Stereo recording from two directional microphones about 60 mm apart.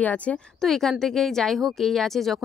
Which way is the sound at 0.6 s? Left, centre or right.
Centre.